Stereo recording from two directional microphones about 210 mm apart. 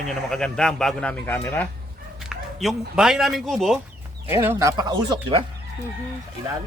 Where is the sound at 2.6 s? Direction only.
Centre (ahead or behind).